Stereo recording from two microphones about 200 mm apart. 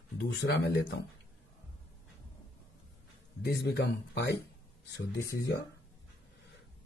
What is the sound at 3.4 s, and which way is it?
Speech, 55° left (ahead or behind).